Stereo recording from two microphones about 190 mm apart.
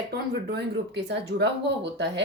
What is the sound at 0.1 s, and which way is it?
A woman's voice, 60° right (ahead or behind).